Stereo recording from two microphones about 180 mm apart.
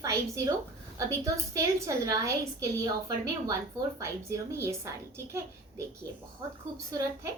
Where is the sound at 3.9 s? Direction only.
15° right (ahead or behind).